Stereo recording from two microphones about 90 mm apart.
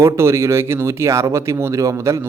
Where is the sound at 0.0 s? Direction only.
30° right (ahead or behind).